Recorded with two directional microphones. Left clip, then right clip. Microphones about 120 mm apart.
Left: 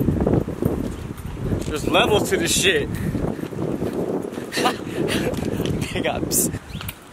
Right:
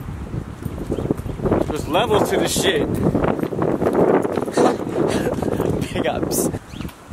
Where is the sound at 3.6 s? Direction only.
40° right (ahead or behind).